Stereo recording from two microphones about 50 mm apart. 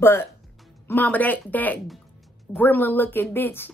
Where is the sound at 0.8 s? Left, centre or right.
Left.